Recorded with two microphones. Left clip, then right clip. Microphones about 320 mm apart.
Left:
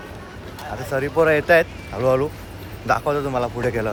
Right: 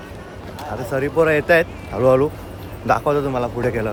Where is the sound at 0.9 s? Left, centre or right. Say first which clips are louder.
Right 1 dB; centre.